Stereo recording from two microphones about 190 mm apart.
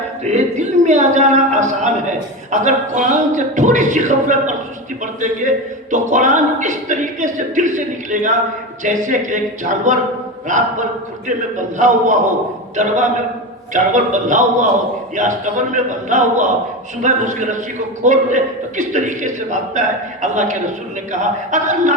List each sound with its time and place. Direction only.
0.3 s a woman's voice: 40° right (ahead or behind)
5.9 s a woman's voice: 40° right (ahead or behind)